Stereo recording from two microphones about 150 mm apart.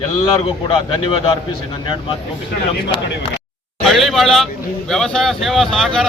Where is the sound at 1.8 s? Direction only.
35° left (ahead or behind).